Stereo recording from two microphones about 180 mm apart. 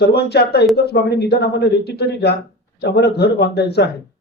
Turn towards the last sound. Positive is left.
turn(degrees=65)  # may be behind; listen again after turning